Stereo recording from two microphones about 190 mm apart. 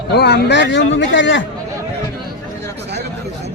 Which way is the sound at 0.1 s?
60° left (ahead or behind).